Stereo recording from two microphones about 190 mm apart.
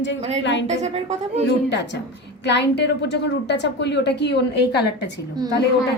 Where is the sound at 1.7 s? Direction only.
70° left (ahead or behind).